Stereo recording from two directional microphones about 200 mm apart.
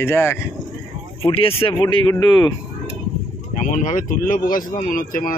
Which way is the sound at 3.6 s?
35° left (ahead or behind).